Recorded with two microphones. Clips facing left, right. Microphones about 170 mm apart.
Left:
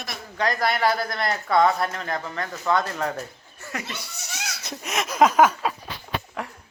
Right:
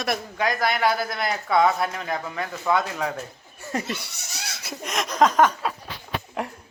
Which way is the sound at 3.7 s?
30° right (ahead or behind).